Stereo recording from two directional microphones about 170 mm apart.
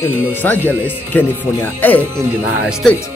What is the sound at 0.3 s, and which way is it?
Speech, 10° left (ahead or behind).